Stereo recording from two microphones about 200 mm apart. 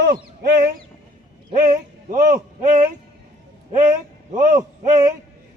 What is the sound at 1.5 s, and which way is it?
A man's voice, 40° right (ahead or behind).